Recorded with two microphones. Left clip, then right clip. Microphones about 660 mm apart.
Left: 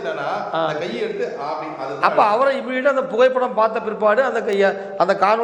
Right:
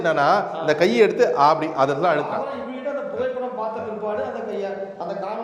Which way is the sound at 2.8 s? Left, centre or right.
Left.